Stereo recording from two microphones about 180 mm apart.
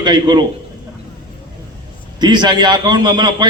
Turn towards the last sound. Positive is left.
turn(degrees=-25)  # may be behind; listen again after turning